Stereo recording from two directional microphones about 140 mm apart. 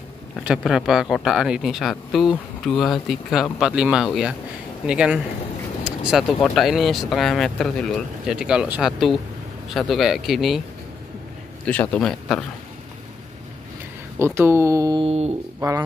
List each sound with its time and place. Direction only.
0.4 s speech: 5° right (ahead or behind)
5.9 s a sound: 5° right (ahead or behind)
6.4 s speech: centre (ahead or behind)
11.6 s a man's voice: 10° left (ahead or behind)
14.1 s speech: 15° right (ahead or behind)
15.0 s a sound: 50° right (ahead or behind)